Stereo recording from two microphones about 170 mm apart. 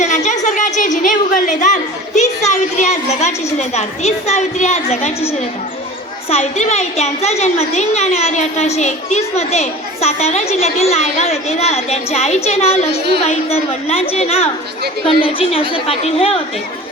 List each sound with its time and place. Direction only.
0.0 s a sound: 45° left (ahead or behind)
2.5 s a woman's voice: 45° left (ahead or behind)
6.3 s a woman's voice: 40° left (ahead or behind)